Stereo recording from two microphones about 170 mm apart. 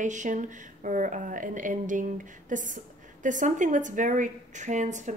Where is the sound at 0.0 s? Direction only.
45° right (ahead or behind).